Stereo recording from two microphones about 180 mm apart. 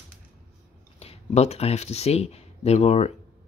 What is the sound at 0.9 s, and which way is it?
Speech, 35° left (ahead or behind).